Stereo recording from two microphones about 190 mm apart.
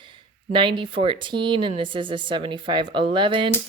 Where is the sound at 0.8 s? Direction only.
25° right (ahead or behind).